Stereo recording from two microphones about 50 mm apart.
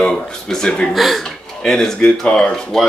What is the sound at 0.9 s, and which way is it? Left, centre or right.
Speech, centre.